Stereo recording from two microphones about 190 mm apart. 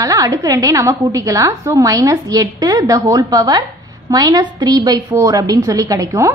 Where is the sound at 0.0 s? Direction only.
20° right (ahead or behind).